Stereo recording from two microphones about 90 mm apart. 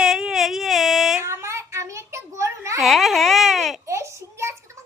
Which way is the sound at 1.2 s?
30° right (ahead or behind).